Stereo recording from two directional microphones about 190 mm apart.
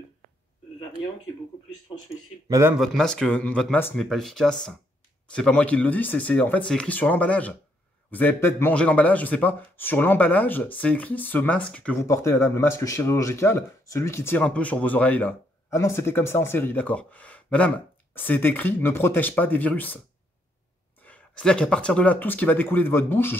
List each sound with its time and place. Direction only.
2.4 s speech: 15° right (ahead or behind)
2.8 s speech: centre (ahead or behind)
21.0 s speech: 5° left (ahead or behind)